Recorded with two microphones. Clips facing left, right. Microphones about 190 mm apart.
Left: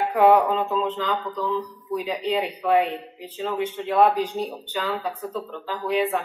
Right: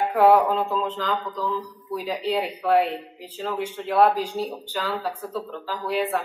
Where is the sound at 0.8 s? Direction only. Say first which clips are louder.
Left 1 dB; 5° right (ahead or behind).